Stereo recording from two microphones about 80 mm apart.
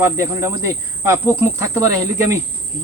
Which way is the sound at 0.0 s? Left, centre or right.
Right.